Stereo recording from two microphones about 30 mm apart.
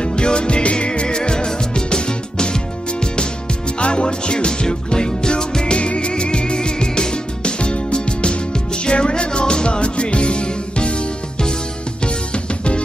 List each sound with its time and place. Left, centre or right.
0.0 s music: left
3.8 s music: left
5.7 s music: left